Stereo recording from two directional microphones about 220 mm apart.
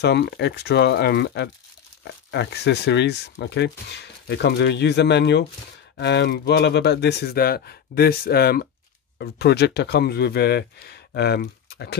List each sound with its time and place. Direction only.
0.0 s speech: 50° left (ahead or behind)